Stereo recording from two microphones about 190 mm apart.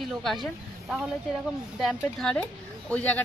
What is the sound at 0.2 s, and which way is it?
Speech, centre (ahead or behind).